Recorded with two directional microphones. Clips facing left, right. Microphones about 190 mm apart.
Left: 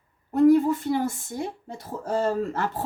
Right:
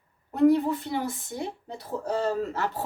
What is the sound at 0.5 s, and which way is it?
A woman's voice, 45° left (ahead or behind).